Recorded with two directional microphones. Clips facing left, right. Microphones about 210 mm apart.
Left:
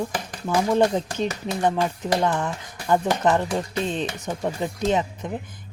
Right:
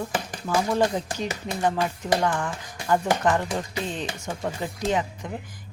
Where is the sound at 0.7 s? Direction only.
25° left (ahead or behind).